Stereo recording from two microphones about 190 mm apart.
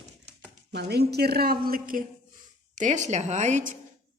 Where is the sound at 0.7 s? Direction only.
60° right (ahead or behind).